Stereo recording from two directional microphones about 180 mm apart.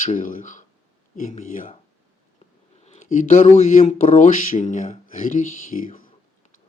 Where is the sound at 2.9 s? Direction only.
45° left (ahead or behind).